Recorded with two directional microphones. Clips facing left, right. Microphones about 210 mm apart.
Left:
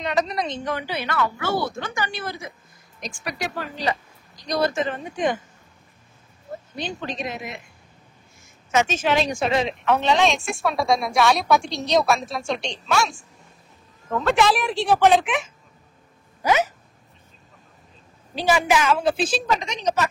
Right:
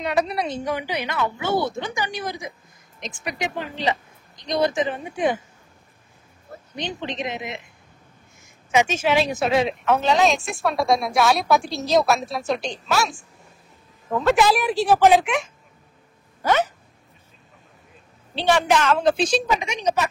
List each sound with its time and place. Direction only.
0.0 s a woman's voice: 5° right (ahead or behind)
6.7 s speech: 20° right (ahead or behind)
8.7 s speech: 10° right (ahead or behind)
16.4 s a sound: 10° left (ahead or behind)
18.3 s speech: 10° left (ahead or behind)